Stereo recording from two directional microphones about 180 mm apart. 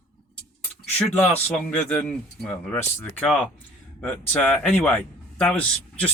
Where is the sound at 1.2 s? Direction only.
5° left (ahead or behind).